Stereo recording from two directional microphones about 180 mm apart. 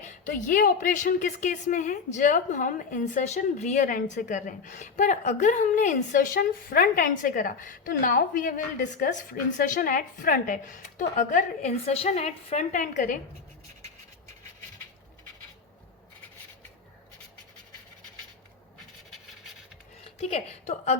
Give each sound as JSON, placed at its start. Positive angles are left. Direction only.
{"t": 0.0, "sound": "a woman's voice", "side_deg": 45}
{"t": 20.1, "sound": "a woman's voice", "side_deg": 35}